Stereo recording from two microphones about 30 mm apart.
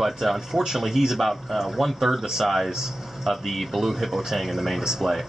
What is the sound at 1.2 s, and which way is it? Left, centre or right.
Speech, centre.